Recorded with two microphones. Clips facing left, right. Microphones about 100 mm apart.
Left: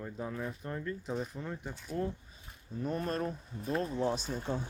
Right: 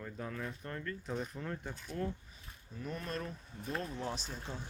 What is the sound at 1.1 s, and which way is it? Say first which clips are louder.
Speech: left 2 dB; centre (ahead or behind).